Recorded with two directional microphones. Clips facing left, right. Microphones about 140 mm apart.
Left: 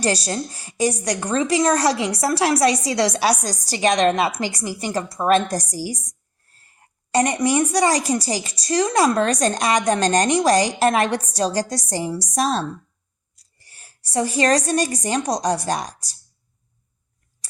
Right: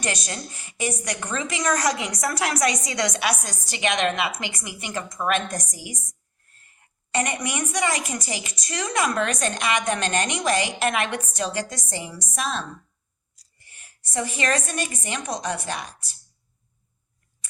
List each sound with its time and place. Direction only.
0.0 s a woman's voice: 35° left (ahead or behind)